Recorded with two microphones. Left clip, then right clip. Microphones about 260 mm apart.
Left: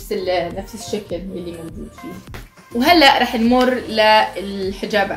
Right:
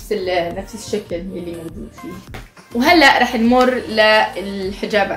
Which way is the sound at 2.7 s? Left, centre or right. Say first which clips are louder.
Right 1 dB; centre.